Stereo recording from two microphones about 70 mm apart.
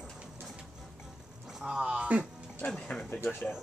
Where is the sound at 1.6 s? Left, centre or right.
Centre.